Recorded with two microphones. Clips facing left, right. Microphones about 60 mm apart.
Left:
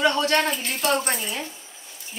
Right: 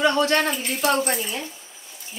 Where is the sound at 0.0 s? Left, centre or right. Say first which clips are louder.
Right 1 dB; right.